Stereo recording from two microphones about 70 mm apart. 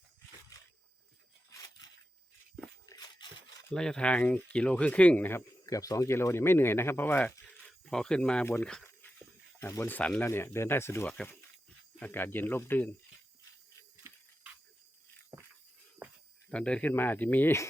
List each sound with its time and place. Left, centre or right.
0.5 s a sound: left
2.9 s a sound: left
3.8 s speech: centre
5.6 s speech: left
6.1 s speech: left
7.4 s a sound: centre
8.9 s dog: left
9.6 s speech: left
11.9 s a man's voice: left
14.0 s a sound: right
16.5 s speech: centre
16.9 s a man's voice: left